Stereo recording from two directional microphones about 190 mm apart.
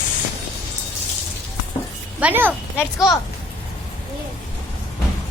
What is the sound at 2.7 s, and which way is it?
Speech, 15° left (ahead or behind).